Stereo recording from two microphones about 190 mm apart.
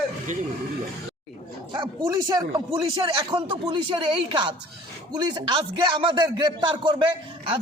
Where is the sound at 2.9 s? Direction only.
25° right (ahead or behind).